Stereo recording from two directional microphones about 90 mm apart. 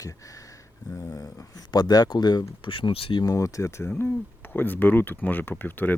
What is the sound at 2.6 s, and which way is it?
Speech, 85° left.